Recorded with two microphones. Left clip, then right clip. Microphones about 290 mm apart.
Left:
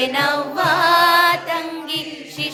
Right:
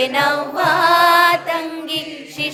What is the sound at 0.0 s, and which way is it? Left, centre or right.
Music, centre.